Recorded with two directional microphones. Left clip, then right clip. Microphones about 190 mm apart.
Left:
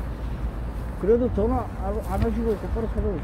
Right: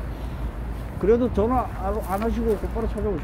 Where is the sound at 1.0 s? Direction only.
25° right (ahead or behind).